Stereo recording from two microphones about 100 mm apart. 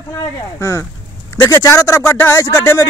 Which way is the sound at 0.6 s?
30° left (ahead or behind).